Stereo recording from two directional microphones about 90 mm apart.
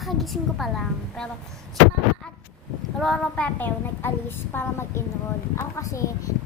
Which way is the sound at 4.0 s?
25° left (ahead or behind).